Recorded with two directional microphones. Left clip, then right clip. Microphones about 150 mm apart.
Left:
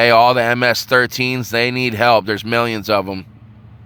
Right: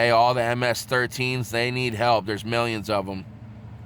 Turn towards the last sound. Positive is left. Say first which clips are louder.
# left 8 dB
turn(degrees=35)  # may be behind; listen again after turning